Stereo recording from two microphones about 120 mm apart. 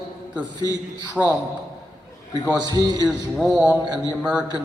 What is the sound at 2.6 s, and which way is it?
Speech, 35° right (ahead or behind).